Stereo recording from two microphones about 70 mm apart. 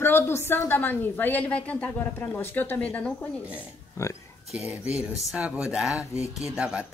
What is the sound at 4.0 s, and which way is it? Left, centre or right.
Speech, left.